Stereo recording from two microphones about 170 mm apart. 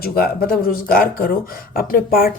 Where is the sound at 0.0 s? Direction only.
60° left (ahead or behind).